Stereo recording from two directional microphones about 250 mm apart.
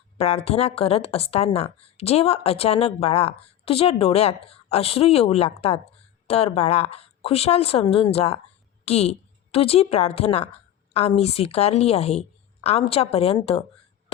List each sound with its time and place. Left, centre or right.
0.2 s a woman's voice: left